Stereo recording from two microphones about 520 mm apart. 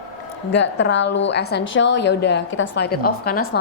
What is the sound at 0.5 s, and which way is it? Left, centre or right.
A woman's voice, centre.